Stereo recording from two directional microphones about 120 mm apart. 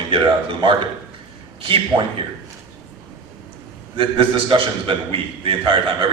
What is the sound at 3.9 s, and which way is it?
A man's voice, 45° right (ahead or behind).